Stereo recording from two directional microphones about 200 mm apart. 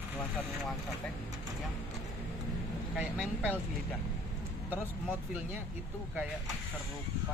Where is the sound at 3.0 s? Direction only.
5° right (ahead or behind).